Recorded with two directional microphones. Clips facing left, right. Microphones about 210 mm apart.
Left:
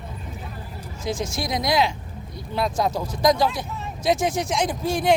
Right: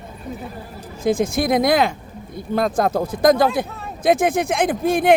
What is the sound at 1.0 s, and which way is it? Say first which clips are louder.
Speech: right 9 dB; 55° right (ahead or behind).